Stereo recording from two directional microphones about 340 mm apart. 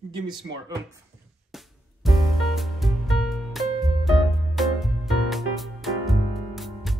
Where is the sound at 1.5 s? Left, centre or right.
Centre.